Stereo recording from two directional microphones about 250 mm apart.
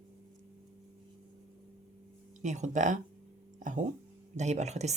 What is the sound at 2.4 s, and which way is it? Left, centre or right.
Speech, right.